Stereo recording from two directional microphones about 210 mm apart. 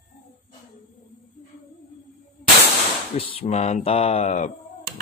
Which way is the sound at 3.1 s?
25° left (ahead or behind).